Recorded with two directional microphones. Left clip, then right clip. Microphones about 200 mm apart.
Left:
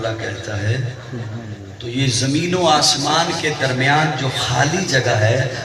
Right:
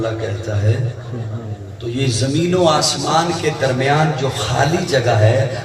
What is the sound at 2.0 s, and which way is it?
A man's voice, 50° right (ahead or behind).